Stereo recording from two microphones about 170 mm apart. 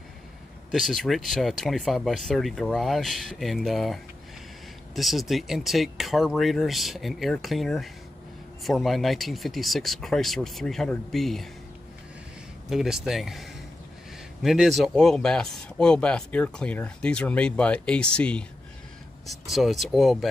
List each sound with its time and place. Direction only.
0.7 s speech: centre (ahead or behind)
12.6 s speech: centre (ahead or behind)